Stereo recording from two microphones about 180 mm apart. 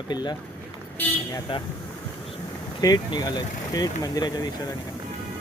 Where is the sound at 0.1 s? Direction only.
25° left (ahead or behind).